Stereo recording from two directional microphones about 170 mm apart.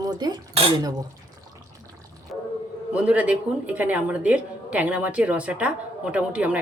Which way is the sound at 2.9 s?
10° right (ahead or behind).